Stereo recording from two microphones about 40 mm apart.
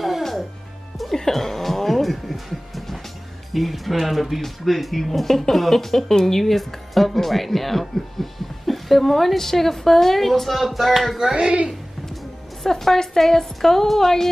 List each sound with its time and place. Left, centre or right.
0.2 s music: centre
1.2 s a sound: centre
3.5 s speech: centre
11.3 s speech: right
12.6 s a woman's voice: centre